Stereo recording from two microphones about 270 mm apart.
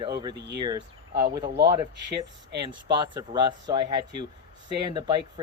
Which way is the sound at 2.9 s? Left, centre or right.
Centre.